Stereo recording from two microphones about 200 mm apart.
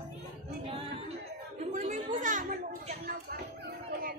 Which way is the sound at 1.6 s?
40° right (ahead or behind).